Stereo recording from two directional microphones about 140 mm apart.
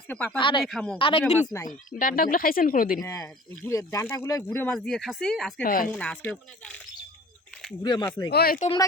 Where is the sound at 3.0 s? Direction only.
20° left (ahead or behind).